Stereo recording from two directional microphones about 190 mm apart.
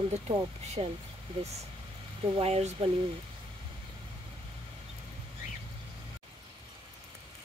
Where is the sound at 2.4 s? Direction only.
35° right (ahead or behind).